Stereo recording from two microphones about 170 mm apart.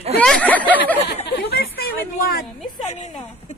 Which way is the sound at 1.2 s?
70° left (ahead or behind).